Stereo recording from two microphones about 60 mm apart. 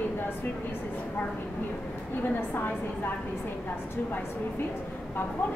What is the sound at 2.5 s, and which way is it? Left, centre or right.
Speech, left.